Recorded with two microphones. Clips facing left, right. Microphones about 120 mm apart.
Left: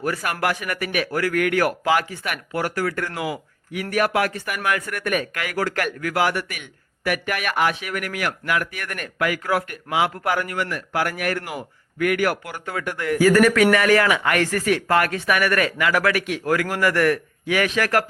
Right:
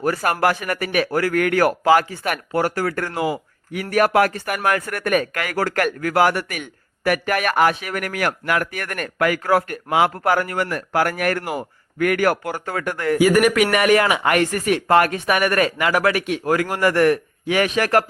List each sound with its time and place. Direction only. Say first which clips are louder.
0.0 s speech: right 5 dB; 40° right (ahead or behind)
13.1 s speech: even; 15° right (ahead or behind)